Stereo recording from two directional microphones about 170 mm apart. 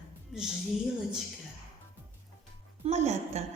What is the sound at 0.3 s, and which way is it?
Speech, 5° right (ahead or behind).